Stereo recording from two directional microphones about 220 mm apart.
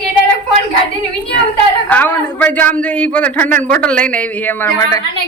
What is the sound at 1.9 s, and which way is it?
A man's voice, 10° left (ahead or behind).